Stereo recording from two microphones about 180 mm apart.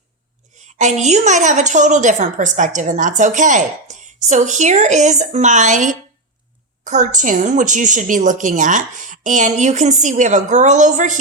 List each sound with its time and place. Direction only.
0.8 s a woman's voice: 40° right (ahead or behind)